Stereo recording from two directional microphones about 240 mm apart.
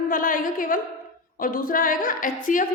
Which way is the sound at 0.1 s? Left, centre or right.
Left.